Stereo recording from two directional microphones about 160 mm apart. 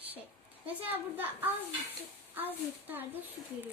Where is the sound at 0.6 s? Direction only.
10° right (ahead or behind).